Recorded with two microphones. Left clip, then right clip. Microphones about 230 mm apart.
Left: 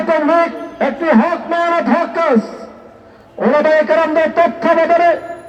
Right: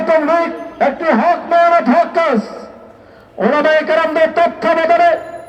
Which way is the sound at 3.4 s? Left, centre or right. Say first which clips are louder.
Left 1 dB; right.